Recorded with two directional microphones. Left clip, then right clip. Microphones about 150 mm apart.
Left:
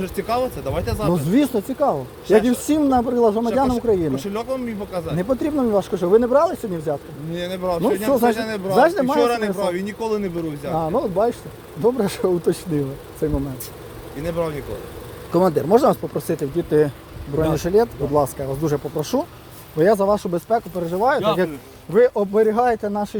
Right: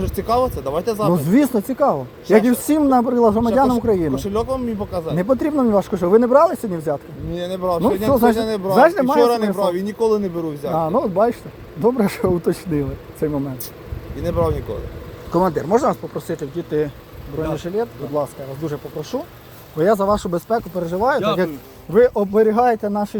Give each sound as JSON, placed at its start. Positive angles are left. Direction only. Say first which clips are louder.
{"t": 0.0, "sound": "speech", "louder": "right 3 dB", "side_deg": -5}
{"t": 1.1, "sound": "speech", "louder": "left 1 dB", "side_deg": -15}
{"t": 2.2, "sound": "speech", "louder": "right 1 dB", "side_deg": 0}
{"t": 2.5, "sound": "speech", "louder": "right 2 dB", "side_deg": -10}
{"t": 4.1, "sound": "speech", "louder": "right 3 dB", "side_deg": 0}
{"t": 5.1, "sound": "speech", "louder": "right 3 dB", "side_deg": -20}
{"t": 7.3, "sound": "speech", "louder": "right 2 dB", "side_deg": 0}
{"t": 15.7, "sound": "speech", "louder": "left 2 dB", "side_deg": 45}
{"t": 17.5, "sound": "speech", "louder": "left 6 dB", "side_deg": 75}
{"t": 19.8, "sound": "speech", "louder": "even", "side_deg": 5}
{"t": 21.9, "sound": "speech", "louder": "right 2 dB", "side_deg": -30}